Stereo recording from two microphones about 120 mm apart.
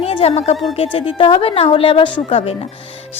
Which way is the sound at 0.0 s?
55° left (ahead or behind).